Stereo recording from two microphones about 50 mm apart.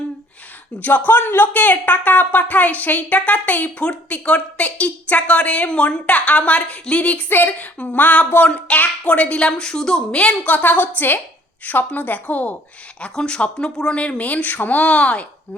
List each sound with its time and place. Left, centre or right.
0.8 s speech: left
1.5 s a woman's voice: left
10.5 s speech: left
13.0 s a woman's voice: centre